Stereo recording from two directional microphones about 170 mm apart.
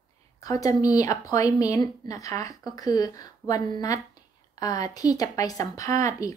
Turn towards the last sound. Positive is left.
turn(degrees=20)  # may be behind; listen again after turning